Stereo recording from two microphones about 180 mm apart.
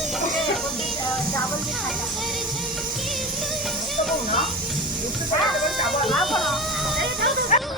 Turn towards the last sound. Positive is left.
turn(degrees=40)  # may be behind; listen again after turning